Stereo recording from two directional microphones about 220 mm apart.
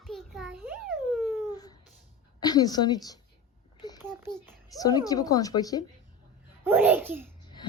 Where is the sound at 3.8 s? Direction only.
20° left (ahead or behind).